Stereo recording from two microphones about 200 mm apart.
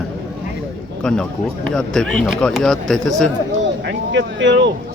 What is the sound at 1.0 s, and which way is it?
Speech, 5° left (ahead or behind).